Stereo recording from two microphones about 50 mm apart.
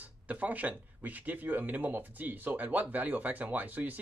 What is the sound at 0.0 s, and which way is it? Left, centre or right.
Speech, right.